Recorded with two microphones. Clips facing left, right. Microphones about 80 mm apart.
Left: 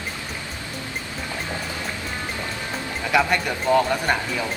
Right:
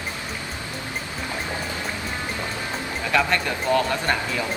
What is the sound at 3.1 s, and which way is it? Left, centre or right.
Speech, centre.